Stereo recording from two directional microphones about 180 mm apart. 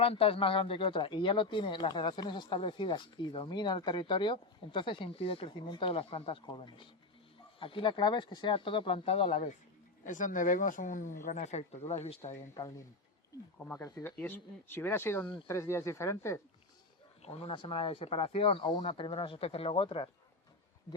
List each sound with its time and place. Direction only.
0.0 s speech: 30° left (ahead or behind)
12.5 s speech: 20° left (ahead or behind)
17.2 s speech: 35° left (ahead or behind)